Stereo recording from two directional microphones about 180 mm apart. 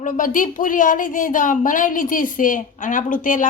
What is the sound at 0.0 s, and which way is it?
Speech, 45° left (ahead or behind).